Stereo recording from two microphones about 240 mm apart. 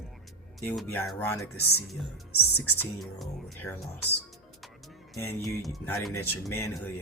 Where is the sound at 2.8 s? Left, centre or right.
Centre.